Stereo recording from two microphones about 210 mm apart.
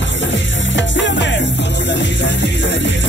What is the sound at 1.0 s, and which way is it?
Music, 60° left (ahead or behind).